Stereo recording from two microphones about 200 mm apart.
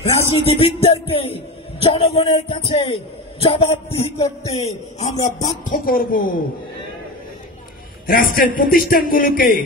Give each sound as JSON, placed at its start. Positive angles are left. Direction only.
{"t": 0.0, "sound": "speech", "side_deg": 30}
{"t": 8.1, "sound": "speech", "side_deg": 45}